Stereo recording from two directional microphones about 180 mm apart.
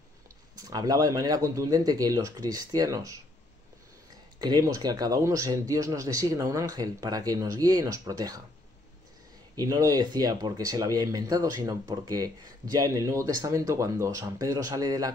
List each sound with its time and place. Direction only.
0.6 s speech: 20° right (ahead or behind)
4.4 s speech: 20° right (ahead or behind)
9.6 s speech: 20° right (ahead or behind)